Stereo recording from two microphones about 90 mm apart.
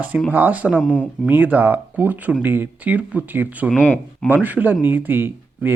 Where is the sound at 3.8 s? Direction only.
15° left (ahead or behind).